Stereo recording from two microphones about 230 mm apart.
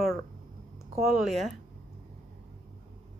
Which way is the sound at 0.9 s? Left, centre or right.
Centre.